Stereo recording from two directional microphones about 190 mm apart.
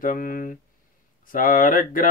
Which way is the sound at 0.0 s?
45° left (ahead or behind).